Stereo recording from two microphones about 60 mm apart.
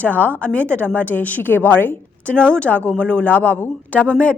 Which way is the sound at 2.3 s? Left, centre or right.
Centre.